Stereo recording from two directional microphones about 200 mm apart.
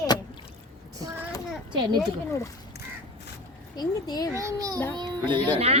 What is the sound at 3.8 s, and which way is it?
Speech, 20° left (ahead or behind).